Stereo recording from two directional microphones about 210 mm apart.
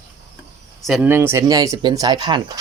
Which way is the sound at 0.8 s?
5° right (ahead or behind).